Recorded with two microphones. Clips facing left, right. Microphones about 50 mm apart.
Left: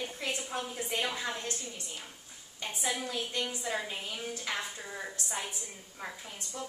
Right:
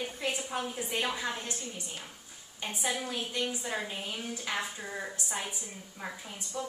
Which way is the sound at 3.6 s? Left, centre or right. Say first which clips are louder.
Even; centre.